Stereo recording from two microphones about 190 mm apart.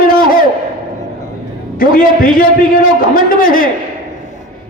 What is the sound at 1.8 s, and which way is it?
A man's voice, 50° left (ahead or behind).